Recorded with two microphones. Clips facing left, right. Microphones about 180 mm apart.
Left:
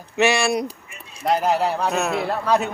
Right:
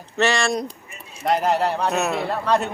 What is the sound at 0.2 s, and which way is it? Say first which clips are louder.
A man's voice: left 2 dB; 10° left (ahead or behind).